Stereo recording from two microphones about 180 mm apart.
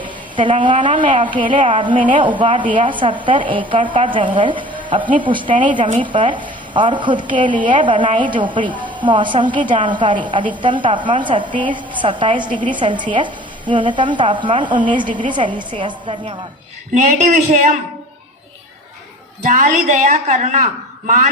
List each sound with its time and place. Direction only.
0.0 s a woman's voice: 25° right (ahead or behind)
16.9 s a woman's voice: 40° right (ahead or behind)
19.4 s a woman's voice: 45° right (ahead or behind)